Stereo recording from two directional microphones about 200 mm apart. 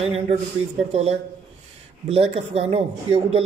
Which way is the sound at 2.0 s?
30° right (ahead or behind).